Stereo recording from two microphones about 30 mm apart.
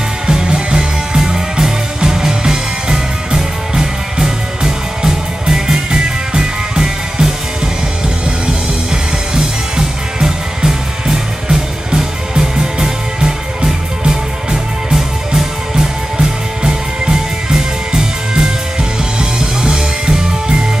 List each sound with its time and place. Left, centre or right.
0.3 s music: right
9.3 s music: right
15.7 s music: right